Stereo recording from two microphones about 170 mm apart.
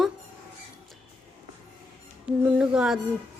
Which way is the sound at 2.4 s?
5° right (ahead or behind).